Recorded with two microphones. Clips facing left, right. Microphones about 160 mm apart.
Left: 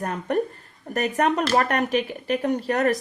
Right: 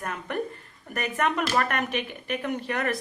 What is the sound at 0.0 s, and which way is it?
Speech, 35° left (ahead or behind).